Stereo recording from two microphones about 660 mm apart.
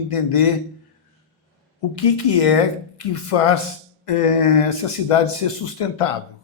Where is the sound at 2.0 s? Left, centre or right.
Left.